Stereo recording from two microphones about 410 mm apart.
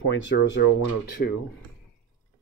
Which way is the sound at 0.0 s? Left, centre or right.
Left.